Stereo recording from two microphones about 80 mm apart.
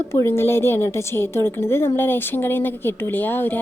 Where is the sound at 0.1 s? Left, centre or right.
Left.